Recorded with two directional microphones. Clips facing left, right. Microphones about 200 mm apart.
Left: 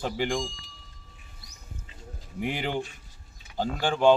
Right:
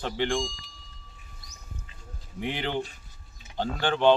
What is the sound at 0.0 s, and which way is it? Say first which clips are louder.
Speech: even; 5° left (ahead or behind).